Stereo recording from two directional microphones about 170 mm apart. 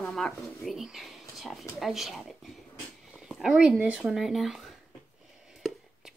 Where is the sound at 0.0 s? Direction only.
5° left (ahead or behind).